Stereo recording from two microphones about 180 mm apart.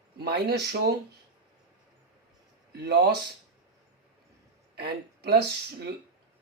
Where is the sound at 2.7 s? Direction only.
65° right (ahead or behind).